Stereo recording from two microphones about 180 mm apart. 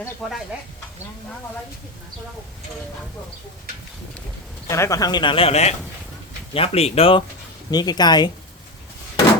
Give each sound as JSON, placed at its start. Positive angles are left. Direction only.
{"t": 0.2, "sound": "speech", "side_deg": 0}
{"t": 4.7, "sound": "speech", "side_deg": 15}